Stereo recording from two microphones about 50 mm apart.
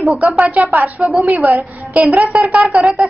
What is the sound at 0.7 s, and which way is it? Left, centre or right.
A child's voice, right.